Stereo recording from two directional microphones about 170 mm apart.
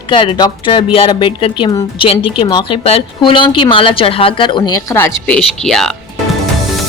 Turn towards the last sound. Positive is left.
turn(degrees=0)  # may be behind; listen again after turning